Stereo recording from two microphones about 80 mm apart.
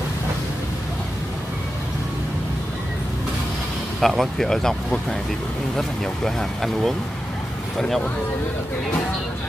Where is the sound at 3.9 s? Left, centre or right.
Centre.